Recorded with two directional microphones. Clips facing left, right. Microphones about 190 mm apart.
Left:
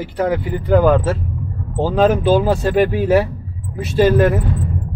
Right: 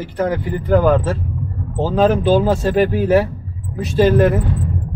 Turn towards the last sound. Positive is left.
turn(degrees=5)  # may be behind; listen again after turning